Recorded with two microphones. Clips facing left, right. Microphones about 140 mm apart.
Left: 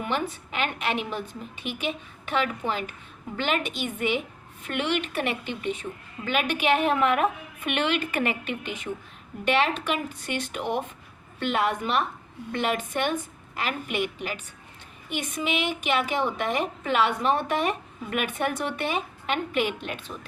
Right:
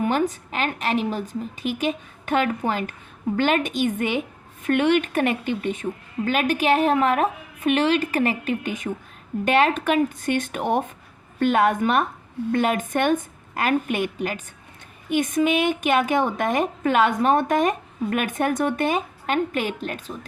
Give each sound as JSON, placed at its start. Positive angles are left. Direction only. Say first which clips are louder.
{"t": 0.0, "sound": "a woman's voice", "louder": "right 7 dB", "side_deg": -40}